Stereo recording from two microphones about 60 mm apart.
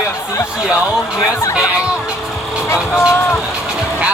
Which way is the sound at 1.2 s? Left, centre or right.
Left.